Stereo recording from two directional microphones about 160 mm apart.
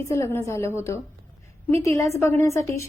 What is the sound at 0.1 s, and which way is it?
Speech, 15° left (ahead or behind).